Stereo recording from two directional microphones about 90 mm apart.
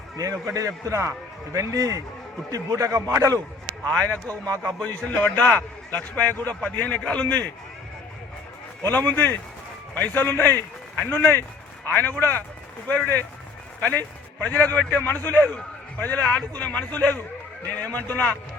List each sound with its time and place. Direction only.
0.2 s a man's voice: 40° right (ahead or behind)
4.3 s a man's voice: 40° right (ahead or behind)
4.6 s a man's voice: 15° left (ahead or behind)
8.8 s a man's voice: 25° left (ahead or behind)
14.4 s a man's voice: 20° left (ahead or behind)